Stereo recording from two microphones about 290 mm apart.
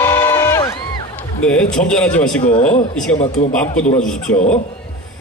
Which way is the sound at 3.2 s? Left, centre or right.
Left.